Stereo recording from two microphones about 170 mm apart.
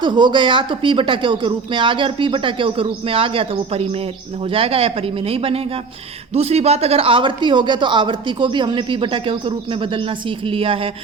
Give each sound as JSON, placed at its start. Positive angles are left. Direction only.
{"t": 0.0, "sound": "speech", "side_deg": -25}